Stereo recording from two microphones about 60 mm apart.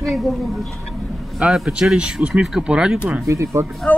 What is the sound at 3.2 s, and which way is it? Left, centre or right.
Speech, right.